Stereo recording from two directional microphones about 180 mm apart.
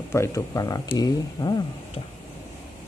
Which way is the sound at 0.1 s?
15° left (ahead or behind).